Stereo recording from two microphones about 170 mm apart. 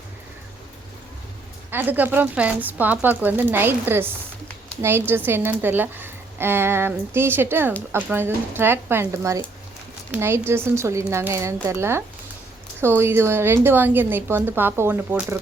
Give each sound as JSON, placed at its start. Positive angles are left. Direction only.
{"t": 1.7, "sound": "a woman's voice", "side_deg": -10}